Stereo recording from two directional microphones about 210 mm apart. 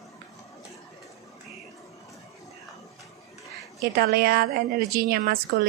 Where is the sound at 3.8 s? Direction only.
45° right (ahead or behind).